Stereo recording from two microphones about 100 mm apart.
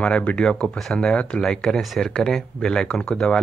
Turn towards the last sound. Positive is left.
turn(degrees=5)  # may be behind; listen again after turning